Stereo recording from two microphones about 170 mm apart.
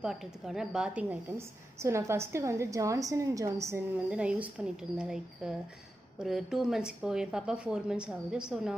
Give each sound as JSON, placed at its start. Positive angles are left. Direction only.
{"t": 0.0, "sound": "a woman's voice", "side_deg": -5}